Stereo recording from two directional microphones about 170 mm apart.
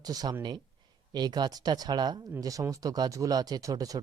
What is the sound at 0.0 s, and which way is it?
Speech, 20° right (ahead or behind).